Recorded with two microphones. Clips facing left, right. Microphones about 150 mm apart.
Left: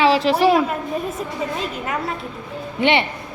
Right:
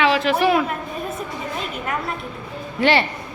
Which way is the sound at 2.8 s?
20° left (ahead or behind).